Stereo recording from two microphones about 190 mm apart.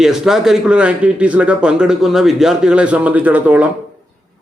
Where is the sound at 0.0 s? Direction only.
Centre (ahead or behind).